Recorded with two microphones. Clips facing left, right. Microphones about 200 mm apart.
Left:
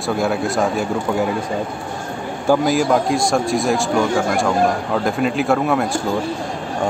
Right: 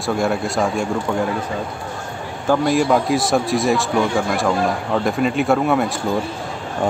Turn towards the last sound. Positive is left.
turn(degrees=0)  # may be behind; listen again after turning